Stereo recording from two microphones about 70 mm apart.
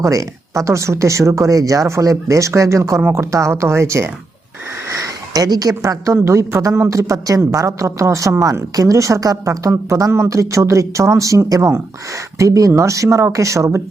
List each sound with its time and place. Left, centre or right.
0.0 s a woman's voice: right
4.9 s a woman's voice: right